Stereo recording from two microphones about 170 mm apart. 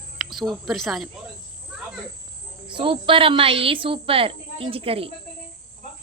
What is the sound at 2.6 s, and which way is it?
A woman's voice, 30° right (ahead or behind).